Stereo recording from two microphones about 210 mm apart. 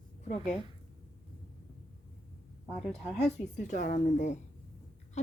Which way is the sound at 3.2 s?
35° left (ahead or behind).